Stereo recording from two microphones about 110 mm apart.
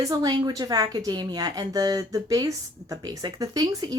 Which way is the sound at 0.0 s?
35° right (ahead or behind).